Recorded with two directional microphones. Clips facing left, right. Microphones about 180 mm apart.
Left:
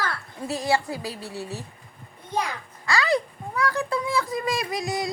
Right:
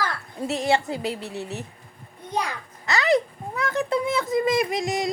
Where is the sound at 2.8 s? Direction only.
20° right (ahead or behind).